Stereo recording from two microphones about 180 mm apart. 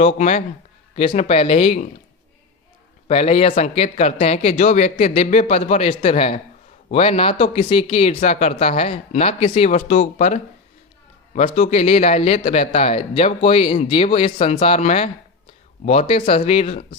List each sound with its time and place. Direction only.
0.2 s speech: 40° left (ahead or behind)
3.1 s speech: 35° left (ahead or behind)